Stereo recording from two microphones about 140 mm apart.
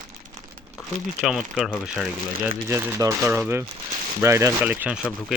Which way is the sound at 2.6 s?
20° right (ahead or behind).